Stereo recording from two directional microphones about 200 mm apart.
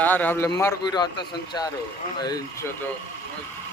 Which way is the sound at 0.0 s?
10° left (ahead or behind).